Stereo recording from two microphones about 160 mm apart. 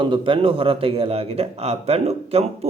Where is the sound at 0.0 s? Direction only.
30° right (ahead or behind).